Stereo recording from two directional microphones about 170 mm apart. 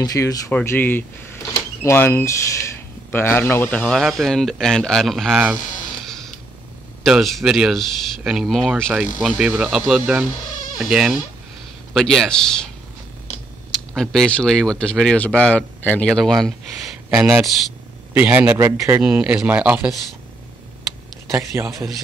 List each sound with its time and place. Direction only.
0.0 s speech: 20° left (ahead or behind)
0.5 s speech: 10° left (ahead or behind)
6.0 s a sound: centre (ahead or behind)
7.1 s speech: centre (ahead or behind)
13.7 s speech: 5° left (ahead or behind)
21.3 s speech: 15° right (ahead or behind)